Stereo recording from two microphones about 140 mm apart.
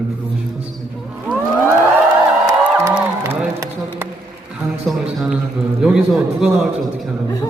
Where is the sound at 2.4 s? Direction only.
20° right (ahead or behind).